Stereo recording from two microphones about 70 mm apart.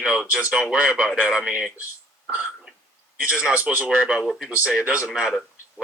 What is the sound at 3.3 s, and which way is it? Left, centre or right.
Speech, centre.